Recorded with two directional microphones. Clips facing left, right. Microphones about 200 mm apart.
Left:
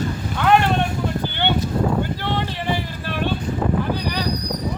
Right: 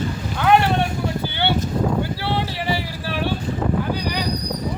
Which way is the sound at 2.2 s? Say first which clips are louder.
Even; 10° right (ahead or behind).